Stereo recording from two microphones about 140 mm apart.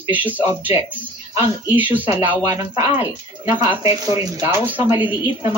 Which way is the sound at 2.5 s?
25° right (ahead or behind).